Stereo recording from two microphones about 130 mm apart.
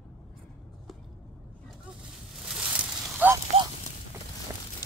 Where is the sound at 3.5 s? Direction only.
50° right (ahead or behind).